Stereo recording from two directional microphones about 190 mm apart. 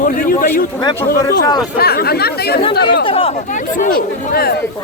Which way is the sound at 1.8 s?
55° left (ahead or behind).